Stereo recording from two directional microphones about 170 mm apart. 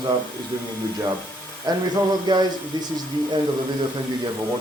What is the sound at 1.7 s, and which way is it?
Speech, 25° right (ahead or behind).